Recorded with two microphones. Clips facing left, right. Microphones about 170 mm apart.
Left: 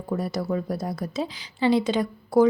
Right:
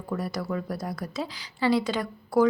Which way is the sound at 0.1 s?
25° left (ahead or behind).